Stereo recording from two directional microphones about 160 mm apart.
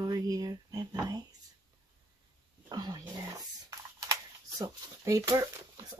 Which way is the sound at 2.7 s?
25° right (ahead or behind).